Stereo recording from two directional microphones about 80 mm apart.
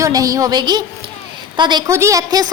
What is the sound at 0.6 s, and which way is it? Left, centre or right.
A woman's voice, right.